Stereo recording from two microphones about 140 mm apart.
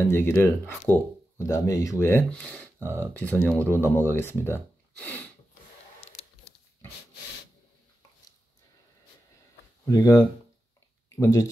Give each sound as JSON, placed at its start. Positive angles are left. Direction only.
{"t": 0.1, "sound": "speech", "side_deg": 15}
{"t": 5.9, "sound": "a sound", "side_deg": 45}
{"t": 9.8, "sound": "speech", "side_deg": 25}